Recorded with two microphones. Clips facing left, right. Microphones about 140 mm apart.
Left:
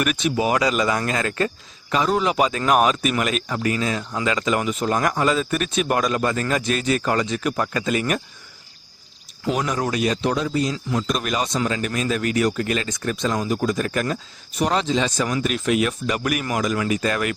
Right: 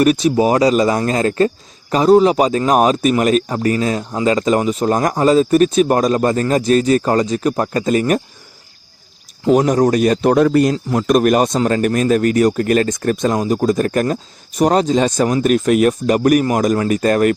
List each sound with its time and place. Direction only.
0.0 s speech: 35° right (ahead or behind)
9.5 s speech: 45° right (ahead or behind)